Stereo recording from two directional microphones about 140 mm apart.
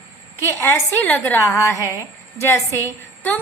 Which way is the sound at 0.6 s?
15° left (ahead or behind).